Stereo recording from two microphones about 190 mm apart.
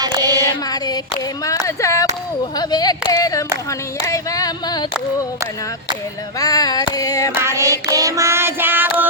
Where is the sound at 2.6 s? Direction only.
20° left (ahead or behind).